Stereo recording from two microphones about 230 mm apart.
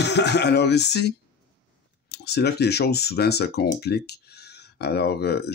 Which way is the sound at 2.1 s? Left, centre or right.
Left.